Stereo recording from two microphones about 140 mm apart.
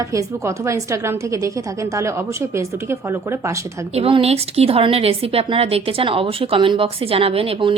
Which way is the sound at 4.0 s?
45° right (ahead or behind).